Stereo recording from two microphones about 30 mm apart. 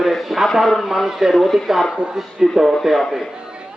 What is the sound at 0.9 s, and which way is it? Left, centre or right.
Speech, centre.